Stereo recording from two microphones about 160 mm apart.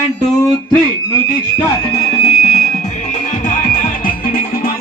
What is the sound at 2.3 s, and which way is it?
Music, 45° left (ahead or behind).